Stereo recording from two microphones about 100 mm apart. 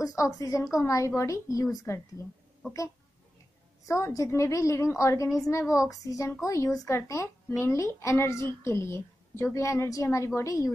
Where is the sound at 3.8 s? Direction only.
30° left (ahead or behind).